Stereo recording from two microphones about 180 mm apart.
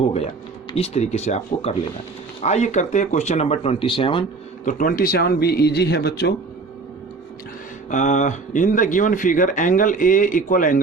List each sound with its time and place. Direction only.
0.7 s speech: 35° left (ahead or behind)
4.6 s speech: 50° left (ahead or behind)
7.9 s speech: 45° left (ahead or behind)